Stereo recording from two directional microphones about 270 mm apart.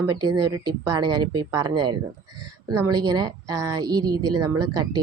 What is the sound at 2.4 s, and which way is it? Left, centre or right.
Speech, right.